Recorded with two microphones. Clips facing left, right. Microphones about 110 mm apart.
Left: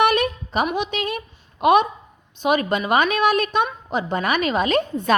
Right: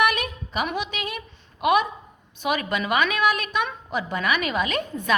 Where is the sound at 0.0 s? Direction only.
30° left (ahead or behind).